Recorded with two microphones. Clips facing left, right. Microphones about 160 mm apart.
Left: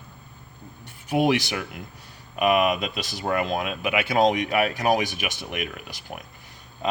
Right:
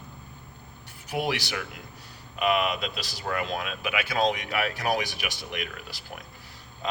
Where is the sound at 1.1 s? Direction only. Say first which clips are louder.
Left 7 dB; 20° left (ahead or behind).